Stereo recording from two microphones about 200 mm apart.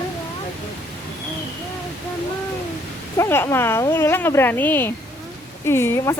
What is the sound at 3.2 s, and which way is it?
Speech, 15° left (ahead or behind).